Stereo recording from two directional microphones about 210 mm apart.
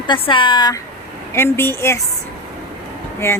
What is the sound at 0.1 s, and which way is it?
A woman's voice, 25° left (ahead or behind).